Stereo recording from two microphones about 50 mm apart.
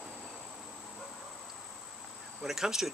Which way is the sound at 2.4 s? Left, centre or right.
Centre.